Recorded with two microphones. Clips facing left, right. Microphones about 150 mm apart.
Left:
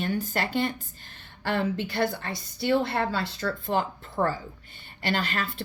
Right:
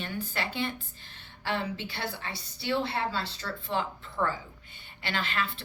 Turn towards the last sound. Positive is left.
turn(degrees=40)  # may be behind; listen again after turning